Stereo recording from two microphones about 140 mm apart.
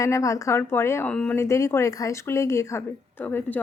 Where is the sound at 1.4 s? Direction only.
20° left (ahead or behind).